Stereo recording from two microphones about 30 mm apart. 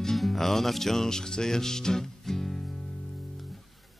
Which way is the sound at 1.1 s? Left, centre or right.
Centre.